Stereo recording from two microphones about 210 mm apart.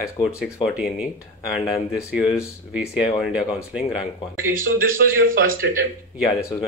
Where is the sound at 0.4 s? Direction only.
5° right (ahead or behind).